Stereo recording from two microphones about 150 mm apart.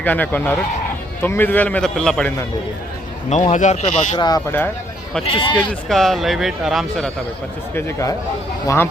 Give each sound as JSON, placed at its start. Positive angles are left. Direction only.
{"t": 0.0, "sound": "a man's voice", "side_deg": 10}
{"t": 3.2, "sound": "speech", "side_deg": 50}
{"t": 4.2, "sound": "speech", "side_deg": 25}
{"t": 5.5, "sound": "speech", "side_deg": 0}
{"t": 7.8, "sound": "a man's voice", "side_deg": 20}